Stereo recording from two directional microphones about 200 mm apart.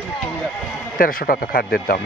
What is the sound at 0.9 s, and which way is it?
Speech, 45° left (ahead or behind).